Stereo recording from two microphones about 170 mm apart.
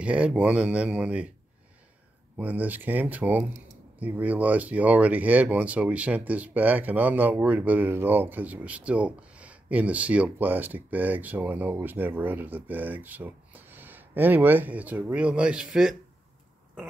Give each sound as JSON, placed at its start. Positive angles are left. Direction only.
{"t": 0.0, "sound": "speech", "side_deg": -5}
{"t": 2.3, "sound": "speech", "side_deg": -10}